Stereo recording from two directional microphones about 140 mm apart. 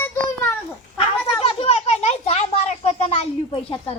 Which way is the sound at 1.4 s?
45° left (ahead or behind).